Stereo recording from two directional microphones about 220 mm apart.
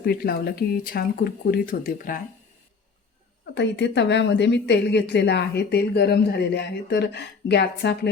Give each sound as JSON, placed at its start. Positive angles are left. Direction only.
{"t": 0.0, "sound": "a woman's voice", "side_deg": 45}
{"t": 3.5, "sound": "a woman's voice", "side_deg": 50}